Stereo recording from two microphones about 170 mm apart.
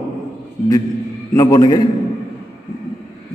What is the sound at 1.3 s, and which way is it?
Speech, 20° left (ahead or behind).